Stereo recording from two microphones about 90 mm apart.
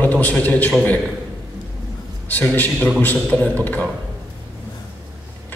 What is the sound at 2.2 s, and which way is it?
A man's voice, 20° left (ahead or behind).